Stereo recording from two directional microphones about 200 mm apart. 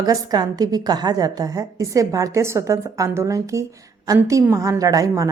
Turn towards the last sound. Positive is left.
turn(degrees=-15)  # may be behind; listen again after turning